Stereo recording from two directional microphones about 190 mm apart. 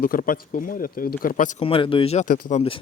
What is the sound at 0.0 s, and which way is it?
Speech, 45° left (ahead or behind).